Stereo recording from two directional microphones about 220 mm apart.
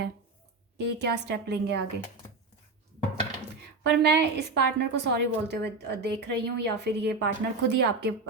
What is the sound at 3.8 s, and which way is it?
A woman's voice, 50° right (ahead or behind).